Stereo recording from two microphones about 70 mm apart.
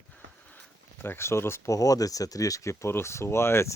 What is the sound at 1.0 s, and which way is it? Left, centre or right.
Speech, left.